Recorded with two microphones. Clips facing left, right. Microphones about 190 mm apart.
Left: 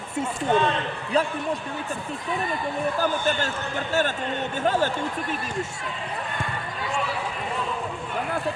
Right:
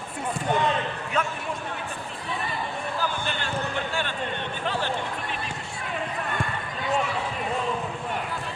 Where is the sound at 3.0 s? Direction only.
45° left (ahead or behind).